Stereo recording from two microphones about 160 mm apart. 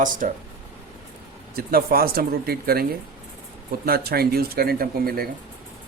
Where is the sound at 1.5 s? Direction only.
70° right (ahead or behind).